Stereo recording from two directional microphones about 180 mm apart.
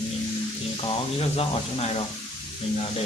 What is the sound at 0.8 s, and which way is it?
Speech, 30° left (ahead or behind).